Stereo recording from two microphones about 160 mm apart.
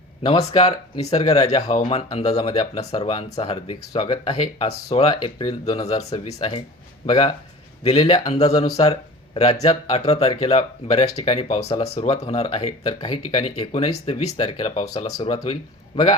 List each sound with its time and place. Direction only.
0.2 s speech: 40° left (ahead or behind)